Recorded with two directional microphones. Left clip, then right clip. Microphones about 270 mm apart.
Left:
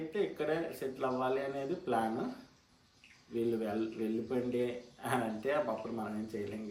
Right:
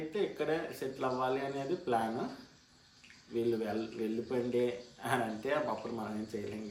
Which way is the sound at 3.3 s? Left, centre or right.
Centre.